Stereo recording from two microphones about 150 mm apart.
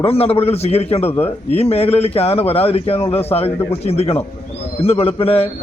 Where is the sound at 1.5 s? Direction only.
40° left (ahead or behind).